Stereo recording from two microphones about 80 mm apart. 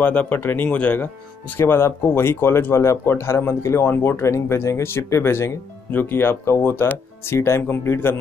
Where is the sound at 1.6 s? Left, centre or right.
Left.